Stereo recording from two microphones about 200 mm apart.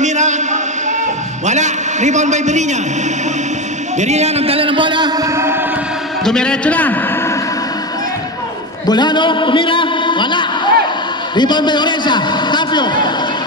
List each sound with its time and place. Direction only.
0.0 s a sound: 35° right (ahead or behind)
1.4 s a man's voice: 35° right (ahead or behind)
4.0 s a man's voice: 35° right (ahead or behind); by 5.7 s 10° right (ahead or behind)
6.2 s a man's voice: 5° left (ahead or behind)
8.8 s a man's voice: 20° left (ahead or behind)